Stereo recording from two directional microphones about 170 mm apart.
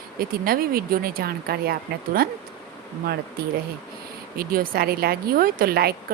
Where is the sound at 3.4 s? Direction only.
65° right (ahead or behind).